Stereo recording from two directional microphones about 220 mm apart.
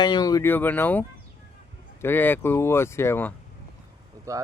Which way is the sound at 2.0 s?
10° left (ahead or behind).